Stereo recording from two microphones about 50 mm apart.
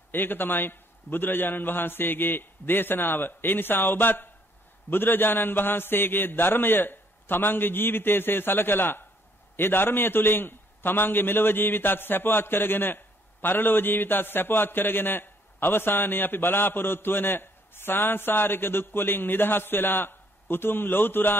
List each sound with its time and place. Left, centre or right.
0.1 s a man's voice: left